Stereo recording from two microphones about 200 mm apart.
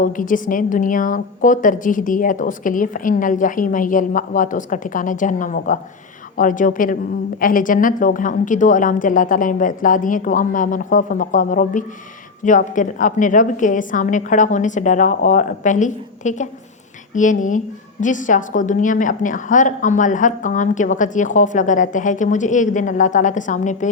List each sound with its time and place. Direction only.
0.0 s a woman's voice: 40° left (ahead or behind)